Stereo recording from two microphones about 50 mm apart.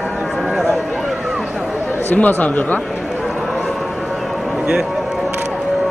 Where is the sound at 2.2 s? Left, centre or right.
Left.